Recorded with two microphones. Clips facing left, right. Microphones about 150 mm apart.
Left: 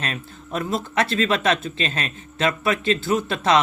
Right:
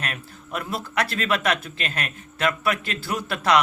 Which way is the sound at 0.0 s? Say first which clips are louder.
Left 3 dB; 25° left (ahead or behind).